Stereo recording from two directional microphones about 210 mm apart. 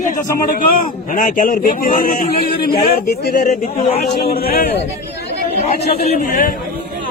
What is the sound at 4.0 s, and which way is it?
Speech, 45° left (ahead or behind).